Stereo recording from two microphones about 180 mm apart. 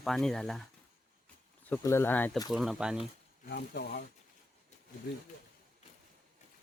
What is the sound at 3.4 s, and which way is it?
Speech, 65° left (ahead or behind).